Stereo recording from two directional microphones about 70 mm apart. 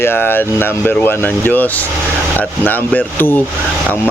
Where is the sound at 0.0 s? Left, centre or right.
Left.